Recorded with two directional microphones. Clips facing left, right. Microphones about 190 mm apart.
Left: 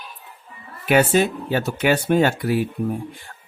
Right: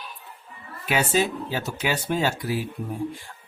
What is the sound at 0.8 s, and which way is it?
Speech, 60° left (ahead or behind).